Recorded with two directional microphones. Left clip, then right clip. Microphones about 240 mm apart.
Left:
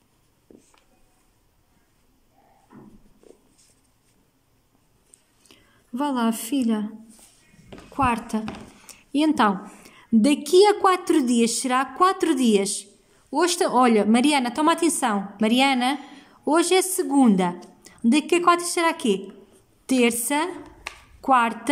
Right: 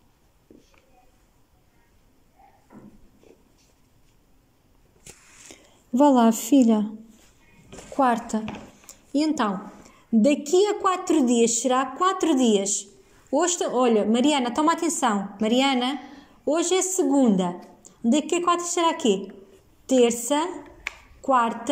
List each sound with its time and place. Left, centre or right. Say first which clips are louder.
5.5 s a woman's voice: right 7 dB; centre
8.0 s a woman's voice: right 1 dB; centre